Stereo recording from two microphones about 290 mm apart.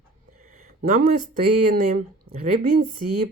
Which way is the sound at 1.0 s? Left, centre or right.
Right.